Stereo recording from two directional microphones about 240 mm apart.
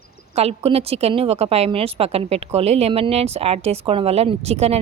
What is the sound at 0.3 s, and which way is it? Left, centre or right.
A woman's voice, right.